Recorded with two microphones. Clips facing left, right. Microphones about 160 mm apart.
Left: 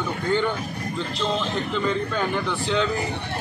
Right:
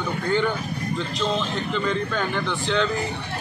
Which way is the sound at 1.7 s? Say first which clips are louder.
Right 1 dB; 5° left (ahead or behind).